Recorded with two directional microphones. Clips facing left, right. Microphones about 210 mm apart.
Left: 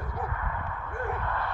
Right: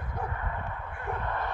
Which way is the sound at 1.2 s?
20° right (ahead or behind).